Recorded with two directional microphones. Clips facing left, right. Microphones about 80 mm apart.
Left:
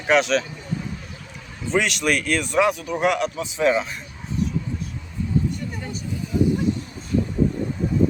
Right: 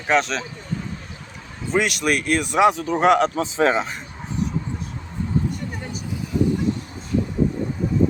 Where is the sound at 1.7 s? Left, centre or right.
Centre; by 3.9 s right.